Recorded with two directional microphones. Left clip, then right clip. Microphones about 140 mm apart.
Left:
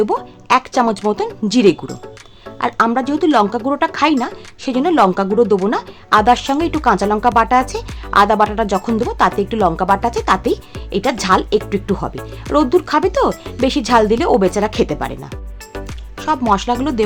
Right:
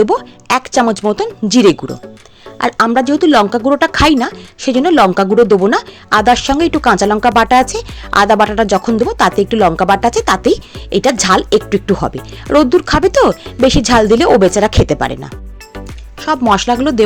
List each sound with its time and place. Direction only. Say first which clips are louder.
0.0 s speech: right 5 dB; 35° right (ahead or behind)
16.5 s speech: right 6 dB; 25° right (ahead or behind)